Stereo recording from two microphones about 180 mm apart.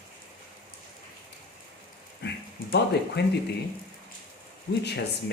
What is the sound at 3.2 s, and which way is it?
Speech, 70° left (ahead or behind).